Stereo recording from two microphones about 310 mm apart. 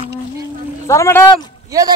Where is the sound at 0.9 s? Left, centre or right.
Centre.